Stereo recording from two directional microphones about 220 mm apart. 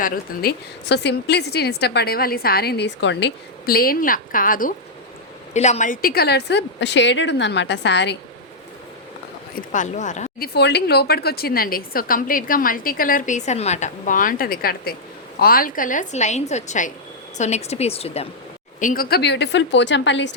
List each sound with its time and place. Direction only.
0.0 s a woman's voice: 40° left (ahead or behind)
9.6 s speech: 35° left (ahead or behind)
10.5 s a woman's voice: 50° left (ahead or behind); by 18.3 s 25° left (ahead or behind)
18.8 s a woman's voice: 40° left (ahead or behind); by 20.3 s 55° left (ahead or behind)